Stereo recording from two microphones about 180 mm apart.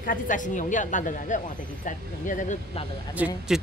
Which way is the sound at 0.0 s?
45° left (ahead or behind).